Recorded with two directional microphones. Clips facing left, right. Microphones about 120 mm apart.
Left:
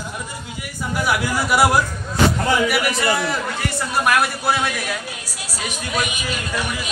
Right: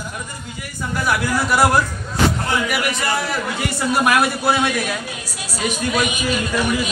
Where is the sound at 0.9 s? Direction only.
10° left (ahead or behind); by 6.0 s 20° right (ahead or behind).